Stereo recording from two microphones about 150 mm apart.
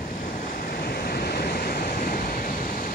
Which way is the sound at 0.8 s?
90° left.